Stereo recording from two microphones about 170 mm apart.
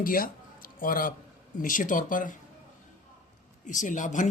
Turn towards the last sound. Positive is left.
turn(degrees=45)  # may be behind; listen again after turning